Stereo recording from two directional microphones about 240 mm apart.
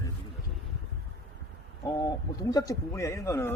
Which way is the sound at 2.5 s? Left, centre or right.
Centre.